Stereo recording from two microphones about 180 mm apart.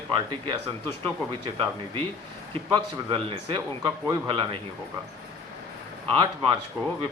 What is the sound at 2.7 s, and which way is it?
A man's voice, 30° right (ahead or behind).